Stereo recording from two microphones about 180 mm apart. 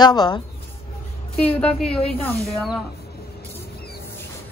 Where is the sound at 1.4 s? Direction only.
5° left (ahead or behind).